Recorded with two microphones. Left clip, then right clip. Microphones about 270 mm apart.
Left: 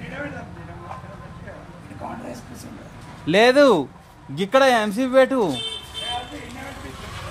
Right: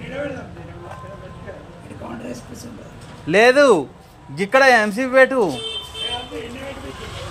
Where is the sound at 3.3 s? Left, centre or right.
Centre.